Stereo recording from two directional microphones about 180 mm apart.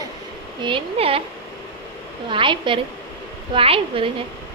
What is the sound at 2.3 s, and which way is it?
Speech, 30° right (ahead or behind).